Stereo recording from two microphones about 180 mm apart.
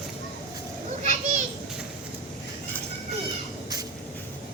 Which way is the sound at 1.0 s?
40° right (ahead or behind).